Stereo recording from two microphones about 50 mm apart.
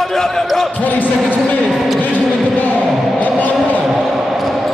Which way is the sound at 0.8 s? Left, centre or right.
Left.